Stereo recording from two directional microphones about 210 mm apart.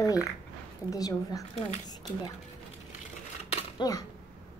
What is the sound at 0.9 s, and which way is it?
Speech, 15° left (ahead or behind).